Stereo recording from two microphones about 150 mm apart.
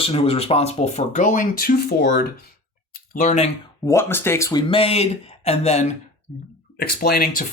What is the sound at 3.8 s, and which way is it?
Speech, 20° left (ahead or behind).